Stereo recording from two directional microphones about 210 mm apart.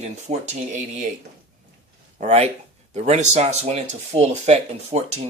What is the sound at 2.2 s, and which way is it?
Speech, 35° right (ahead or behind).